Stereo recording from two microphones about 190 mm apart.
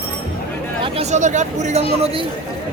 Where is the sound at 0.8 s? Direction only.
30° right (ahead or behind).